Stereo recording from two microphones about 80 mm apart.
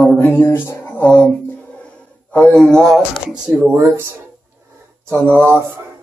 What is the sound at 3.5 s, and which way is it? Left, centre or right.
Speech, right.